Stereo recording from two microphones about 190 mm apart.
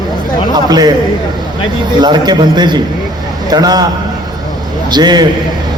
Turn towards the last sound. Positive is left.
turn(degrees=-20)  # may be behind; listen again after turning